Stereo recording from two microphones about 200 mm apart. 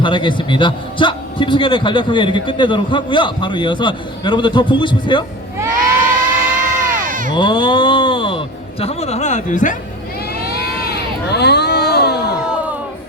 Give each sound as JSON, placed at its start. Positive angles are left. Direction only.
{"t": 0.0, "sound": "a man's voice", "side_deg": 25}
{"t": 5.7, "sound": "crowd", "side_deg": -45}
{"t": 7.3, "sound": "a man's voice", "side_deg": 25}
{"t": 10.5, "sound": "a sound", "side_deg": 50}